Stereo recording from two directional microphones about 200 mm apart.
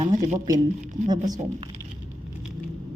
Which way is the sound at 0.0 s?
35° right (ahead or behind).